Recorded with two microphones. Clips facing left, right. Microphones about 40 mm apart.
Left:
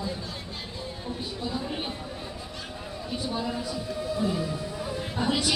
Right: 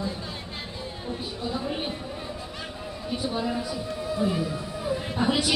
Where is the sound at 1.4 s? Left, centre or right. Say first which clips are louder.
Right 3 dB; centre.